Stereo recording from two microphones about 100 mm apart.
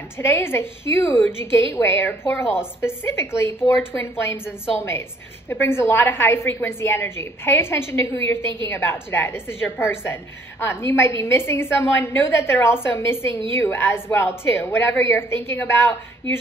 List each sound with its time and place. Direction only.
0.2 s a woman's voice: 25° left (ahead or behind)